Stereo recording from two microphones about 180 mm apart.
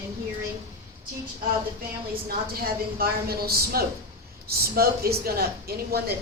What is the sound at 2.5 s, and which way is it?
Speech, 55° right (ahead or behind).